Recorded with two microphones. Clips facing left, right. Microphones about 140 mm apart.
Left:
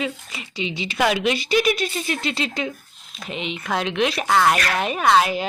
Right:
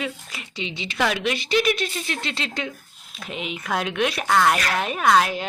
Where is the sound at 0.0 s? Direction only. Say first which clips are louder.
Left 3 dB; centre (ahead or behind).